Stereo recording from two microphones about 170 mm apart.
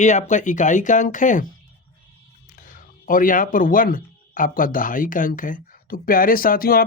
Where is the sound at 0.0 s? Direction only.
45° left (ahead or behind).